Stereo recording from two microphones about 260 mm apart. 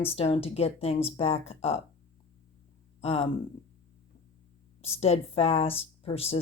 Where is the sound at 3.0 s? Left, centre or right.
Left.